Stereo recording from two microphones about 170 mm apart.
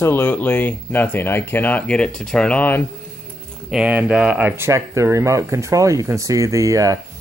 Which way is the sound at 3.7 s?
5° right (ahead or behind).